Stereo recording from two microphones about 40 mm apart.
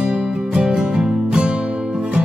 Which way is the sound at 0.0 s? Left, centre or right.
Right.